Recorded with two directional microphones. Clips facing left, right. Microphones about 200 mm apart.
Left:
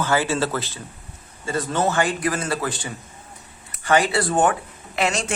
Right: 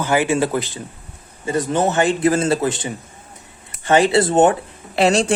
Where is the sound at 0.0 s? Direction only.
15° right (ahead or behind).